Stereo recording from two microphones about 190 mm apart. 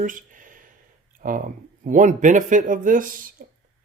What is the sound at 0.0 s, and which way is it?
Speech, 45° right (ahead or behind).